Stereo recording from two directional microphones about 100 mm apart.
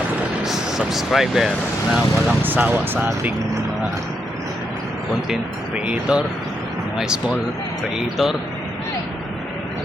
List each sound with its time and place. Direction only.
0.4 s vehicle: 5° right (ahead or behind)
2.4 s speech: 20° right (ahead or behind)
5.3 s speech: 5° right (ahead or behind)